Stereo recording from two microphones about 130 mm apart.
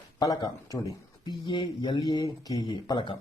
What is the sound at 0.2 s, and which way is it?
Speech, 30° left (ahead or behind).